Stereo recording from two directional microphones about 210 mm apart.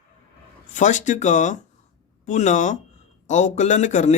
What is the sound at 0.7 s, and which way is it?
A man's voice, 35° left (ahead or behind).